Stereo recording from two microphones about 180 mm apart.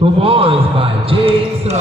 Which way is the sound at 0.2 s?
30° right (ahead or behind).